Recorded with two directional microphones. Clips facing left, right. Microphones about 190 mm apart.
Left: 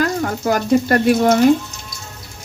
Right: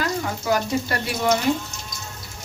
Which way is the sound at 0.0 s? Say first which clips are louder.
Left 7 dB; 50° left (ahead or behind).